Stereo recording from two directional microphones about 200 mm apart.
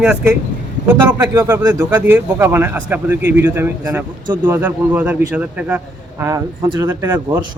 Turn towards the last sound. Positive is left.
turn(degrees=-10)  # may be behind; listen again after turning